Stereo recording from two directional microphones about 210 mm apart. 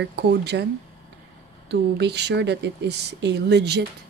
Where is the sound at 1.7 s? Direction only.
55° right (ahead or behind).